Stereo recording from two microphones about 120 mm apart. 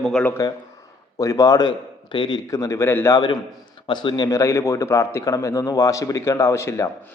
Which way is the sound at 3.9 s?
40° left (ahead or behind).